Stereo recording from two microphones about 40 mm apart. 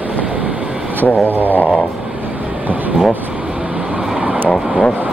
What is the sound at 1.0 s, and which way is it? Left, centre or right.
Speech, left.